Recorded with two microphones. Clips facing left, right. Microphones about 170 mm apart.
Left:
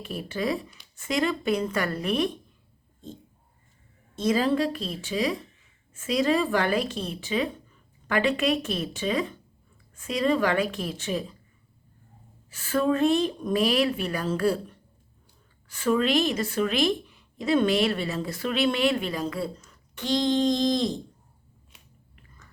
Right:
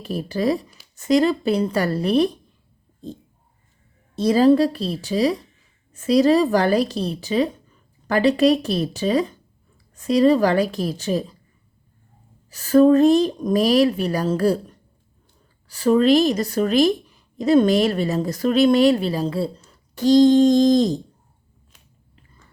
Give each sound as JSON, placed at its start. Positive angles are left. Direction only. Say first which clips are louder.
{"t": 0.0, "sound": "a woman's voice", "louder": "right 7 dB", "side_deg": -35}
{"t": 4.1, "sound": "a woman's voice", "louder": "right 8 dB", "side_deg": -35}
{"t": 12.5, "sound": "a woman's voice", "louder": "right 11 dB", "side_deg": -40}